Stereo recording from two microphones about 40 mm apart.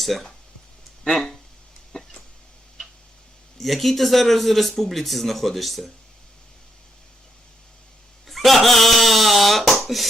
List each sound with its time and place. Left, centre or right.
0.0 s speech: centre
1.9 s a sound: centre
3.6 s speech: centre
8.3 s speech: centre